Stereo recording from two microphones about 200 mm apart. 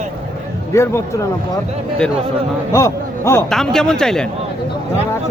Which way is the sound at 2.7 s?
15° left (ahead or behind).